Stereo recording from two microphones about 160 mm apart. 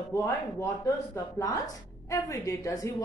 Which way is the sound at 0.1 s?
20° left (ahead or behind).